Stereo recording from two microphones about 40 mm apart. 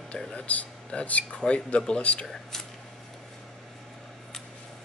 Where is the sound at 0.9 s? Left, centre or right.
Left.